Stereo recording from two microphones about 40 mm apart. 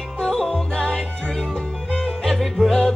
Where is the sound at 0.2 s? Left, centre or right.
Left.